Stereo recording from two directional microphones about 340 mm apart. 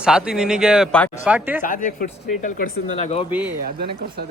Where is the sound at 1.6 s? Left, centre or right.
Left.